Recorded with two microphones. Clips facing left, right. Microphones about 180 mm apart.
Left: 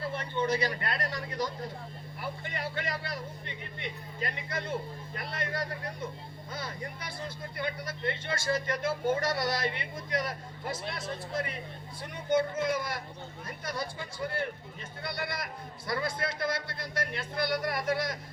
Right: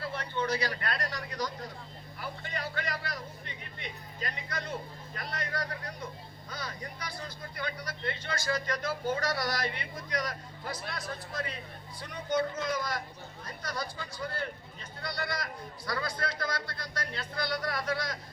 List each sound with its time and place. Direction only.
0.2 s speech: 25° left (ahead or behind)